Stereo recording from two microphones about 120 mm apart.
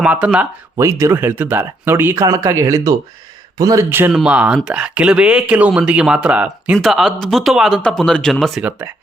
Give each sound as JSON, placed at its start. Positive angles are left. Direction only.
{"t": 0.0, "sound": "speech", "side_deg": -10}
{"t": 0.8, "sound": "speech", "side_deg": -25}
{"t": 3.8, "sound": "speech", "side_deg": -20}
{"t": 4.1, "sound": "speech", "side_deg": -5}
{"t": 6.7, "sound": "speech", "side_deg": 0}